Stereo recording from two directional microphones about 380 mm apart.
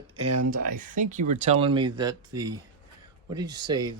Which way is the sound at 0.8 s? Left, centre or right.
Centre.